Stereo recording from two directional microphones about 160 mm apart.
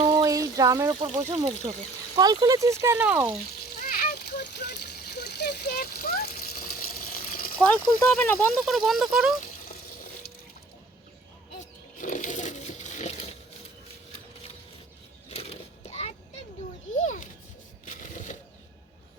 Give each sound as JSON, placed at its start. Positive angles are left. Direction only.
{"t": 0.0, "sound": "a sound", "side_deg": -20}
{"t": 2.1, "sound": "speech", "side_deg": -25}
{"t": 4.1, "sound": "water", "side_deg": 90}
{"t": 7.6, "sound": "speech", "side_deg": 10}
{"t": 11.6, "sound": "a sound", "side_deg": 55}
{"t": 15.3, "sound": "children playing", "side_deg": 40}